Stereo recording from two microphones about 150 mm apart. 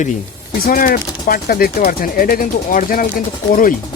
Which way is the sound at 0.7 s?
75° left (ahead or behind).